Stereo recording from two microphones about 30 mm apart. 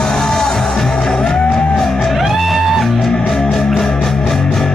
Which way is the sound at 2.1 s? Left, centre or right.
Centre.